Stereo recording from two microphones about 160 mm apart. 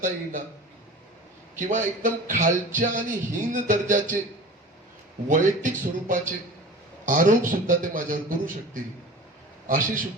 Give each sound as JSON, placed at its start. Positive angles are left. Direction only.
{"t": 0.0, "sound": "a man's voice", "side_deg": -55}
{"t": 1.5, "sound": "a man's voice", "side_deg": -55}
{"t": 5.3, "sound": "a man's voice", "side_deg": -55}
{"t": 9.6, "sound": "a man's voice", "side_deg": -55}